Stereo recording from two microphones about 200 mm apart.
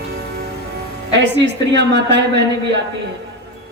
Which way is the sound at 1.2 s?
60° right (ahead or behind).